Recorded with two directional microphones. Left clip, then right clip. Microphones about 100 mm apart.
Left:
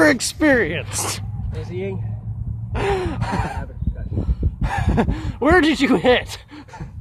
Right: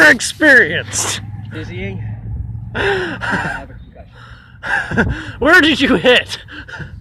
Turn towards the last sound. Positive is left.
turn(degrees=0)  # may be behind; listen again after turning